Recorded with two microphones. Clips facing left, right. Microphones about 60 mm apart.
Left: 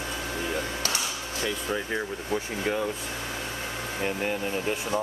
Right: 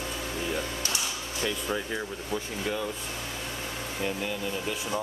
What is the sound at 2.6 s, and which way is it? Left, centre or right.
Speech, left.